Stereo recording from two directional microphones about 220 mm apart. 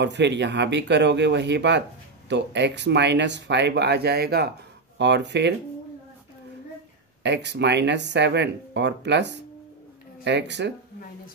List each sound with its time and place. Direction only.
0.0 s speech: 50° right (ahead or behind)
7.2 s speech: 50° right (ahead or behind)